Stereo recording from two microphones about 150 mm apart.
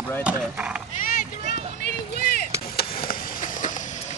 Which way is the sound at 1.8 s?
90° left.